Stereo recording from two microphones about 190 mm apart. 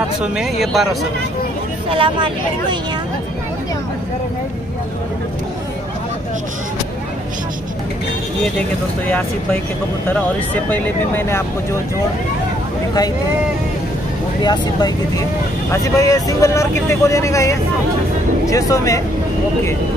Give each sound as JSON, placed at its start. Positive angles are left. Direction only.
{"t": 0.2, "sound": "speech", "side_deg": 0}
{"t": 1.9, "sound": "speech", "side_deg": -30}
{"t": 8.5, "sound": "speech", "side_deg": 5}
{"t": 14.4, "sound": "speech", "side_deg": 20}